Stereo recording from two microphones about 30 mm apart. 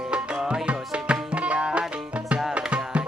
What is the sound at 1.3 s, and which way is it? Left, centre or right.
Tabla, right.